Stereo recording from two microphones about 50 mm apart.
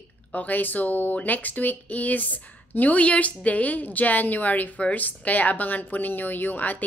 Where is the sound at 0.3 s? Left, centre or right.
Left.